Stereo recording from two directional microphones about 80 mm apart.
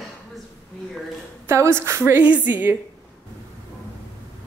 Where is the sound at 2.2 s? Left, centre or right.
Right.